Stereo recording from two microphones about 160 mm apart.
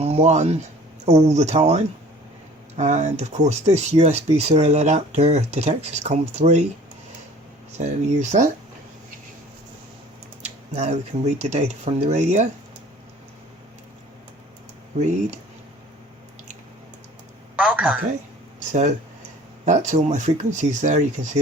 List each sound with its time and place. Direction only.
0.0 s speech: 40° right (ahead or behind)
7.8 s speech: 45° right (ahead or behind)
10.4 s speech: 45° right (ahead or behind)
14.9 s speech: 45° right (ahead or behind)
17.6 s a man's voice: 10° right (ahead or behind)
18.7 s speech: 50° right (ahead or behind)